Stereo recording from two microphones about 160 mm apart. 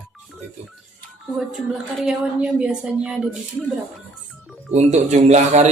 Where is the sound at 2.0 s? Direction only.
5° right (ahead or behind).